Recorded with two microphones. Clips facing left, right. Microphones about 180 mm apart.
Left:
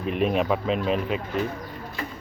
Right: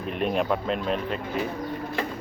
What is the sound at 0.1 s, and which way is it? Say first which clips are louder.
Speech: left 2 dB; centre (ahead or behind).